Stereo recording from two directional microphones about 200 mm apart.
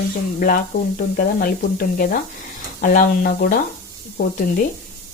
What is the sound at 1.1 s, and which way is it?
Speech, 45° left (ahead or behind).